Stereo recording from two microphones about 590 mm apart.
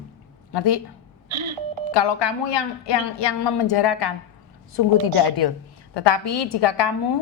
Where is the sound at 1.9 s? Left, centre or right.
Left.